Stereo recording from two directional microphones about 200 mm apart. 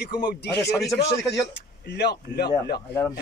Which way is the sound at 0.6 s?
15° left (ahead or behind).